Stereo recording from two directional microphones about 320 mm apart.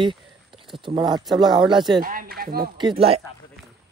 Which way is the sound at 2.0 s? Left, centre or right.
Right.